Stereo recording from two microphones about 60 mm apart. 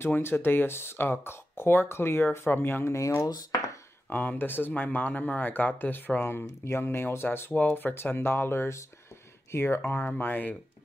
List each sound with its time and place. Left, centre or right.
0.0 s speech: left
3.3 s speech: left
4.1 s speech: left
7.5 s speech: left